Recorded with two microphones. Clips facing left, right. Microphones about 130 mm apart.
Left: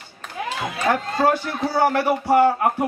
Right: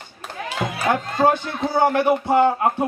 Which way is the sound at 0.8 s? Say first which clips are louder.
Right 1 dB; 20° right (ahead or behind).